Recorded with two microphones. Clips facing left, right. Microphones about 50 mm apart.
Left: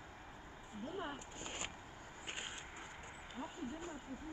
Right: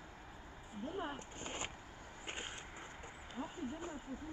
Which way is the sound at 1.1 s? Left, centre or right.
Right.